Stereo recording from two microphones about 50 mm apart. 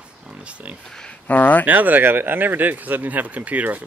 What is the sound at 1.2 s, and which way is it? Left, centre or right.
Speech, left.